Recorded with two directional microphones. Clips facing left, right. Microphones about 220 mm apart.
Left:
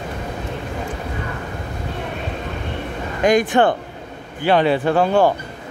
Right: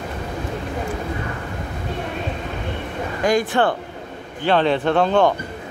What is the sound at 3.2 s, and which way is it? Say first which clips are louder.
Speech: left 3 dB; 20° left (ahead or behind).